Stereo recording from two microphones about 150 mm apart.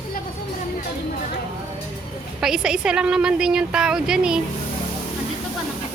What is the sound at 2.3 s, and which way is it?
A woman's voice, 5° right (ahead or behind).